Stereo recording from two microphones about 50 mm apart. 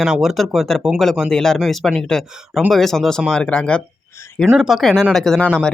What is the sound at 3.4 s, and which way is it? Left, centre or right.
Speech, centre.